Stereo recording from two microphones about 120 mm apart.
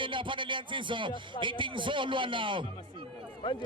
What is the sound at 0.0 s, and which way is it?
Speech, 45° right (ahead or behind).